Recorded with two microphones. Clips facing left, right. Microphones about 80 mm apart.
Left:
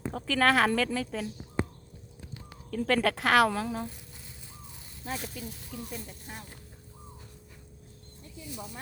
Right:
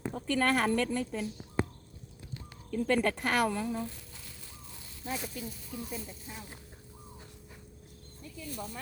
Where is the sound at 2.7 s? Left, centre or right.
Left.